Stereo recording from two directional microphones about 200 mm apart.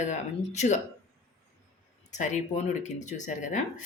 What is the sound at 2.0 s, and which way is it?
Speech, 35° left (ahead or behind).